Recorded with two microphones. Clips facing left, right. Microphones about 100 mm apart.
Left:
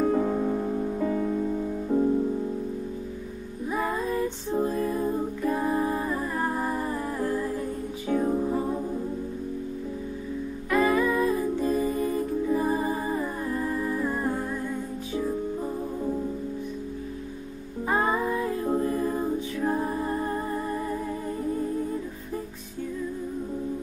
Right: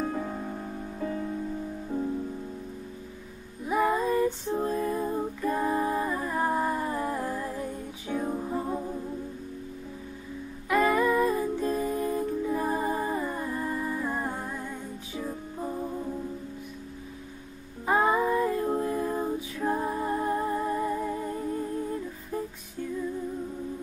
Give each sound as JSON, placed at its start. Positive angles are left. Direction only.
{"t": 0.0, "sound": "music", "side_deg": 40}
{"t": 0.9, "sound": "music", "side_deg": 45}
{"t": 1.9, "sound": "music", "side_deg": 25}
{"t": 3.6, "sound": "female singing", "side_deg": -5}
{"t": 6.3, "sound": "humming", "side_deg": -10}
{"t": 8.2, "sound": "music", "side_deg": 10}
{"t": 10.7, "sound": "music", "side_deg": 0}
{"t": 13.5, "sound": "humming", "side_deg": -10}
{"t": 17.8, "sound": "music", "side_deg": -5}